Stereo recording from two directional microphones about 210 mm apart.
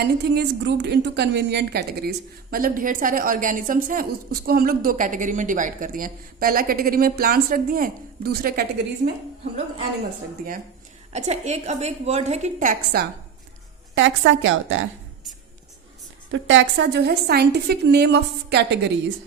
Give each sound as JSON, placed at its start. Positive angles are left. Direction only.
{"t": 0.0, "sound": "a woman's voice", "side_deg": -50}
{"t": 11.1, "sound": "a woman's voice", "side_deg": -30}
{"t": 13.9, "sound": "speech", "side_deg": -65}
{"t": 16.3, "sound": "a woman's voice", "side_deg": -60}